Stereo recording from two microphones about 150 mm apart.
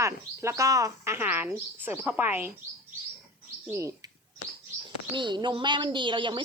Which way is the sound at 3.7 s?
20° right (ahead or behind).